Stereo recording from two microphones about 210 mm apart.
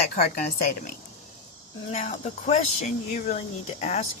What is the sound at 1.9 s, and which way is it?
Speech, 35° left (ahead or behind).